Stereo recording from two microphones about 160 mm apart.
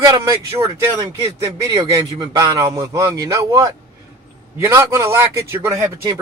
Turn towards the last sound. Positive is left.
turn(degrees=-15)  # may be behind; listen again after turning